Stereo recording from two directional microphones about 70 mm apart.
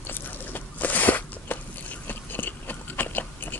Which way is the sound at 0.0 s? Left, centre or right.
Left.